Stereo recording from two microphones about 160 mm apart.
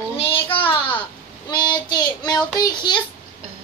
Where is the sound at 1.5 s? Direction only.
25° left (ahead or behind).